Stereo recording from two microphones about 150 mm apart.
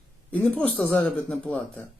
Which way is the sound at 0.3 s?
10° left (ahead or behind).